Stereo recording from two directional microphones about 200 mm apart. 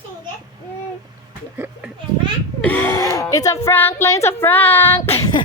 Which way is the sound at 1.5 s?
10° right (ahead or behind).